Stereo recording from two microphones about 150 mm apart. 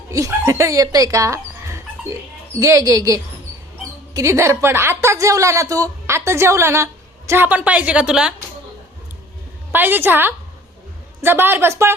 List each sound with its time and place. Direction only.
0.1 s a woman's voice: 20° right (ahead or behind); by 8.3 s 5° right (ahead or behind)
9.7 s a woman's voice: 15° right (ahead or behind)